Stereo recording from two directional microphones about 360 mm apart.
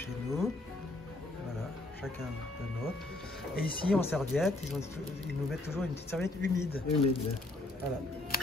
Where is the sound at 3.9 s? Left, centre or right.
Centre.